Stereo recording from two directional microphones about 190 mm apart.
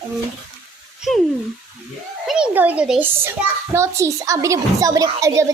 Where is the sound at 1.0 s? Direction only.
5° right (ahead or behind).